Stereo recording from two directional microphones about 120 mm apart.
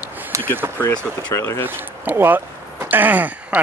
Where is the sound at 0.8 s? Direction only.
20° left (ahead or behind).